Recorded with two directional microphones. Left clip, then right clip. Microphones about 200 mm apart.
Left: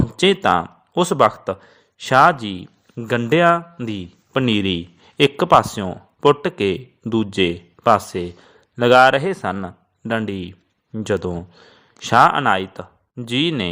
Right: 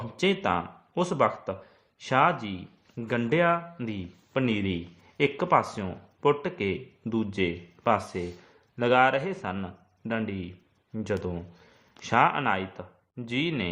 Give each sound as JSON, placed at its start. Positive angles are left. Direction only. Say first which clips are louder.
{"t": 0.0, "sound": "speech", "louder": "left 10 dB", "side_deg": 40}